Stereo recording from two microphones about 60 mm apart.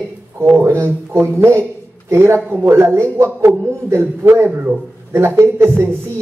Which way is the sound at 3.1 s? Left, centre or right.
Right.